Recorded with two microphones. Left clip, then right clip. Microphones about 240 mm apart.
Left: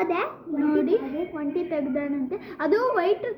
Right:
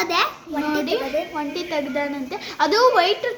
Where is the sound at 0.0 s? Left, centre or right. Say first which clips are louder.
Right 5 dB; right.